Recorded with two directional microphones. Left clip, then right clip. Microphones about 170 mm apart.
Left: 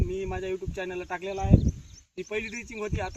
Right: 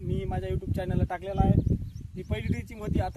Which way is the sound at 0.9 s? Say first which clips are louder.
Right 1 dB; 25° right (ahead or behind).